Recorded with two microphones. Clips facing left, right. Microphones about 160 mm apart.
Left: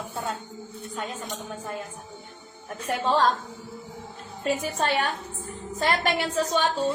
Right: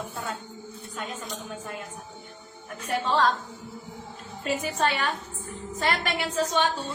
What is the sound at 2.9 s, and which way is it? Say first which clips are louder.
Speech: left 1 dB; 45° left (ahead or behind).